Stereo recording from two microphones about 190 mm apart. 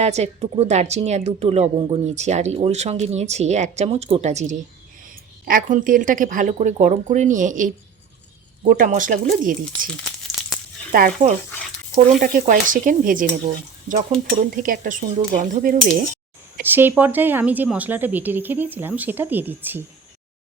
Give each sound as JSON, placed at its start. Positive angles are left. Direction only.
{"t": 0.0, "sound": "a woman's voice", "side_deg": -35}
{"t": 10.9, "sound": "a woman's voice", "side_deg": -50}
{"t": 16.6, "sound": "a woman's voice", "side_deg": -10}